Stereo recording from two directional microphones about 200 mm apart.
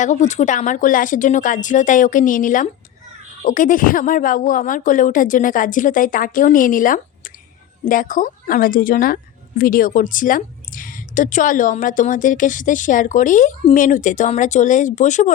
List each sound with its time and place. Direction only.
0.0 s a woman's voice: 35° left (ahead or behind)